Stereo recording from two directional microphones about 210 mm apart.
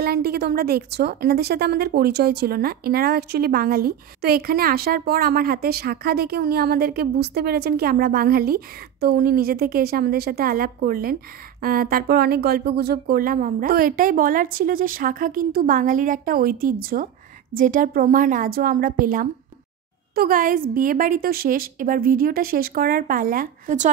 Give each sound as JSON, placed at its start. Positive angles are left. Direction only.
{"t": 0.0, "sound": "a woman's voice", "side_deg": -50}